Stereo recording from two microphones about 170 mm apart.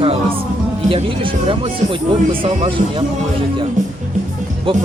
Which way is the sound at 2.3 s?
35° right (ahead or behind).